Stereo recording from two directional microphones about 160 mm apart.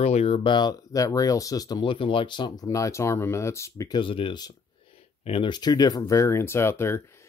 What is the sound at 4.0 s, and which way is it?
Speech, 30° left (ahead or behind).